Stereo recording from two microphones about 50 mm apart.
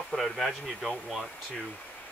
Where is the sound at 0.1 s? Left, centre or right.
Centre.